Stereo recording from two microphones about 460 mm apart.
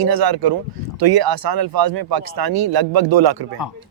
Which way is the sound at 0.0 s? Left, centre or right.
Right.